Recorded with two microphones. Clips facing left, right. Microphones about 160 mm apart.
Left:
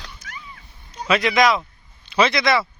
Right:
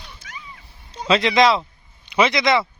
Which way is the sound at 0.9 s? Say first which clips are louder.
Right 2 dB; 25° right (ahead or behind).